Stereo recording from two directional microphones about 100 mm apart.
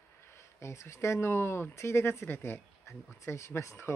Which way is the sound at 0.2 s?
25° left (ahead or behind).